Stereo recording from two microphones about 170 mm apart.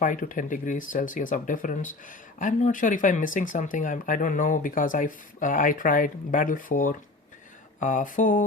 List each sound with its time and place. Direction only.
0.0 s speech: 50° left (ahead or behind)